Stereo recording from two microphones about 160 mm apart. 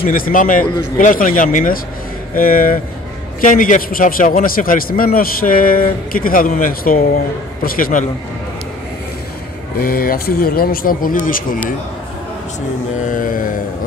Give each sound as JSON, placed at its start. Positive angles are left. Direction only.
{"t": 0.0, "sound": "a man's voice", "side_deg": 60}
{"t": 9.8, "sound": "a man's voice", "side_deg": 70}
{"t": 13.1, "sound": "a man's voice", "side_deg": 60}